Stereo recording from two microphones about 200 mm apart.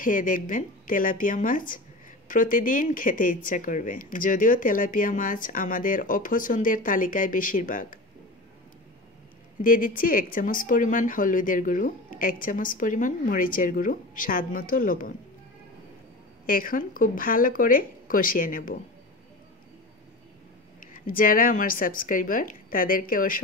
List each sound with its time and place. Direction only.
0.0 s speech: 40° left (ahead or behind)
9.6 s speech: 45° left (ahead or behind)
16.4 s speech: 45° left (ahead or behind)
20.8 s speech: 45° left (ahead or behind)